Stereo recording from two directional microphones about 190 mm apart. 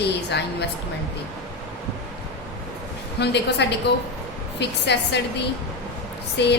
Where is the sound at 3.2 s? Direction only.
65° left (ahead or behind).